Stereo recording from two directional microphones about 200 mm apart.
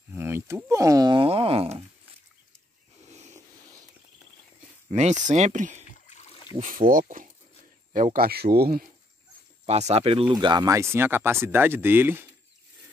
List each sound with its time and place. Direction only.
0.1 s speech: 10° right (ahead or behind); by 1.9 s 30° right (ahead or behind)
3.1 s a sound: 35° right (ahead or behind)
4.9 s speech: 35° right (ahead or behind)
5.9 s a sound: 35° left (ahead or behind)
6.6 s speech: 45° right (ahead or behind)
9.7 s speech: 30° right (ahead or behind); by 12.3 s 10° right (ahead or behind)